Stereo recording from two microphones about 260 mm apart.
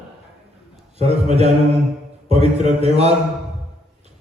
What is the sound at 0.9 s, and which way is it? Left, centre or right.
Mantra, right.